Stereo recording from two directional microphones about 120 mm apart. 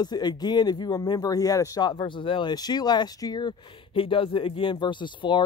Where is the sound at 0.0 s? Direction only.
35° left (ahead or behind).